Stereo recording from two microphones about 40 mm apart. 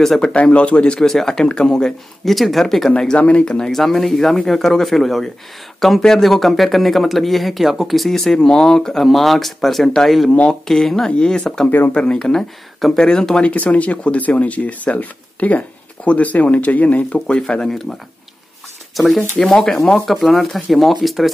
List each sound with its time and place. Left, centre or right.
0.2 s speech: left
0.9 s speech: centre
2.2 s speech: centre
3.2 s speech: left
3.7 s speech: centre
8.4 s speech: centre
9.0 s speech: centre
13.5 s speech: left
17.5 s speech: left
17.9 s speech: centre
19.3 s speech: left
20.1 s speech: centre